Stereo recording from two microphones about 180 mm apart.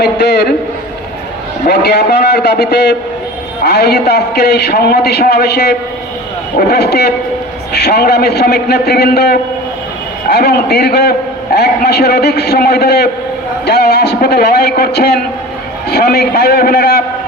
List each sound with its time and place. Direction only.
0.0 s a man's voice: 70° left (ahead or behind)
1.6 s a man's voice: 65° left (ahead or behind)